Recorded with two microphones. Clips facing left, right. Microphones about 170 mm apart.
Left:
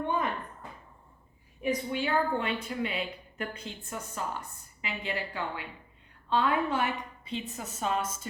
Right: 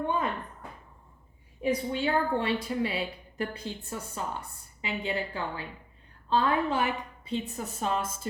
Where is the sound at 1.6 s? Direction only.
30° right (ahead or behind).